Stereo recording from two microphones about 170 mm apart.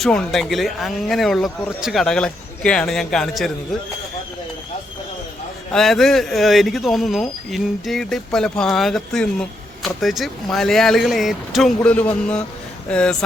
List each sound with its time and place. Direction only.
0.0 s speech: 5° left (ahead or behind)
5.7 s speech: centre (ahead or behind)